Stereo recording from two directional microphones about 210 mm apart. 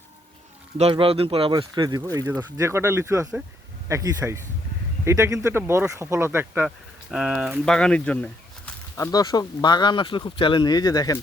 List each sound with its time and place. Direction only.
0.8 s speech: 25° right (ahead or behind); by 9.0 s 5° left (ahead or behind)
9.1 s speech: 20° left (ahead or behind)